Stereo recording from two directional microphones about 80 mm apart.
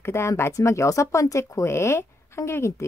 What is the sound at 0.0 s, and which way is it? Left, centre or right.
Speech, left.